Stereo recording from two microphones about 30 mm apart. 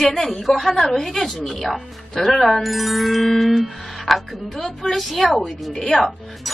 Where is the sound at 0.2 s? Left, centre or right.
Centre.